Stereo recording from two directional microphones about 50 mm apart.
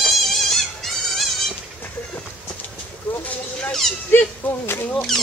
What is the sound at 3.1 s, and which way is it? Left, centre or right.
Clip-clop, left.